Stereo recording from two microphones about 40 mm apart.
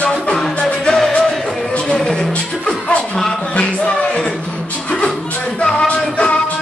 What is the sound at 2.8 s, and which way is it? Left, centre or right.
Music, left.